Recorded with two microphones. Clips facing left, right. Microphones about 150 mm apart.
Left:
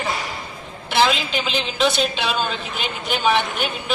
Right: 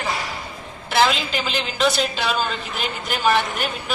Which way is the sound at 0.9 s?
Centre (ahead or behind).